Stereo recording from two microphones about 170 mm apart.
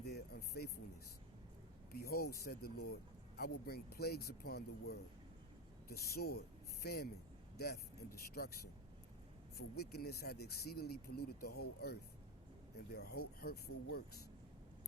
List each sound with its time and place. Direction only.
0.0 s a sound: 65° left (ahead or behind)
1.9 s speech: 65° left (ahead or behind)
9.7 s speech: 65° left (ahead or behind)